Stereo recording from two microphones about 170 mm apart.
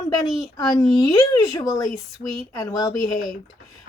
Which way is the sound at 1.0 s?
20° left (ahead or behind).